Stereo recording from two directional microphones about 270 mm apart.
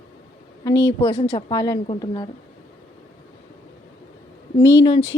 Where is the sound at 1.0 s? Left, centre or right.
Centre.